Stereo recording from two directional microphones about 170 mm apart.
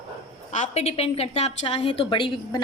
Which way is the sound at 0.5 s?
45° left (ahead or behind).